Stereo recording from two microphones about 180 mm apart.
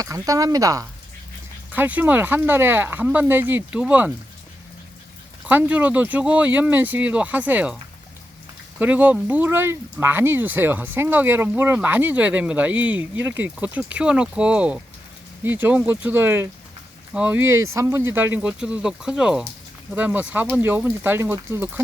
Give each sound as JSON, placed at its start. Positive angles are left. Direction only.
{"t": 0.0, "sound": "speech", "side_deg": -20}
{"t": 5.5, "sound": "speech", "side_deg": -10}
{"t": 8.8, "sound": "speech", "side_deg": -10}